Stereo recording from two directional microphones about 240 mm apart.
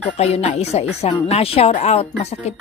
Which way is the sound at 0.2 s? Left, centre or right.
Left.